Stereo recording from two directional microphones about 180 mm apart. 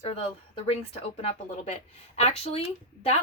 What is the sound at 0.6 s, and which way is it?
A woman's voice, 35° left (ahead or behind).